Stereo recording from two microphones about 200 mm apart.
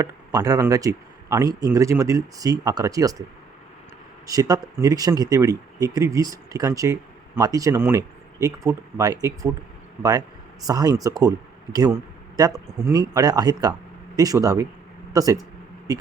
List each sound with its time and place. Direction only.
0.0 s speech: 15° right (ahead or behind)
4.3 s speech: 15° right (ahead or behind)